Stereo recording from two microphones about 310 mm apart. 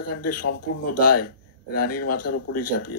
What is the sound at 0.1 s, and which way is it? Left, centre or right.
Speech, left.